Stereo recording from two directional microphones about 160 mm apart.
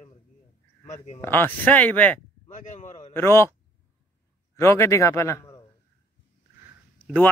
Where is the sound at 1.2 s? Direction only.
10° left (ahead or behind).